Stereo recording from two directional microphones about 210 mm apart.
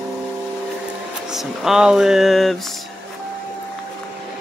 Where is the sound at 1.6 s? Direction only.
5° right (ahead or behind).